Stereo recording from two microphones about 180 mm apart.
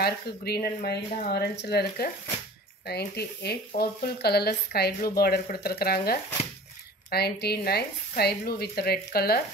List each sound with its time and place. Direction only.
0.0 s speech: 60° left (ahead or behind)